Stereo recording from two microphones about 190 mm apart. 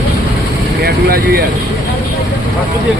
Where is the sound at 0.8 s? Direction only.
55° right (ahead or behind).